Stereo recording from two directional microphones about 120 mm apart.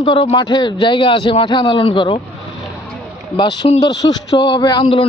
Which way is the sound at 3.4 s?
40° left (ahead or behind).